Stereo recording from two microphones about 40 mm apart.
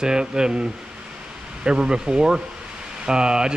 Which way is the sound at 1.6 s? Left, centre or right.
Right.